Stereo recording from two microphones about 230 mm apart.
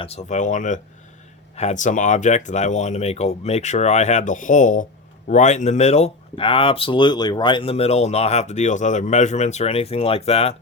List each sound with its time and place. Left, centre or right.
0.0 s speech: left